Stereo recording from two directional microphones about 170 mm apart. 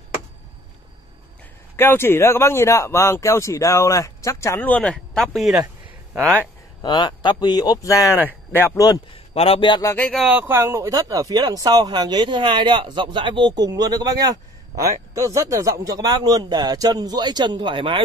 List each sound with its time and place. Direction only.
1.8 s speech: 15° left (ahead or behind)
6.8 s speech: 25° left (ahead or behind)
9.1 s a man's voice: 35° left (ahead or behind); by 10.0 s 20° left (ahead or behind)
10.0 s speech: centre (ahead or behind); by 14.1 s 25° right (ahead or behind)
15.1 s speech: 20° right (ahead or behind)